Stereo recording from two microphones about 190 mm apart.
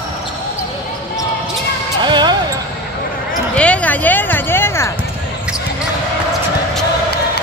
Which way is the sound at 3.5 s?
5° left (ahead or behind).